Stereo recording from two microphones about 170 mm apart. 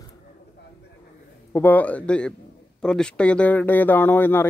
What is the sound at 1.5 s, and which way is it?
Speech, 10° left (ahead or behind).